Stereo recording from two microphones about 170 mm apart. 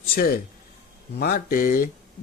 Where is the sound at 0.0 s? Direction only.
60° left (ahead or behind).